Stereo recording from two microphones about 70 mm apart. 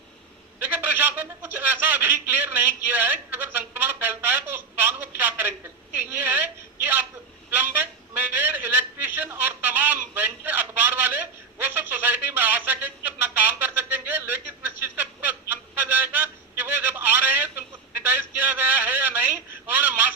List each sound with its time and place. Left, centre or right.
0.6 s a man's voice: right